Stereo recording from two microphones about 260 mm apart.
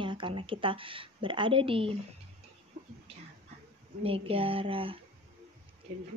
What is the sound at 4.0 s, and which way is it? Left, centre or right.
Speech, right.